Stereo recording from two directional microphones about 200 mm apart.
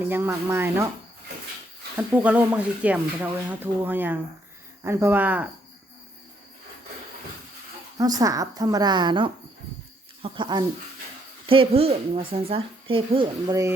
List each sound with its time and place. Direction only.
0.0 s speech: 10° right (ahead or behind)
2.0 s speech: 10° right (ahead or behind)
7.9 s speech: 20° right (ahead or behind)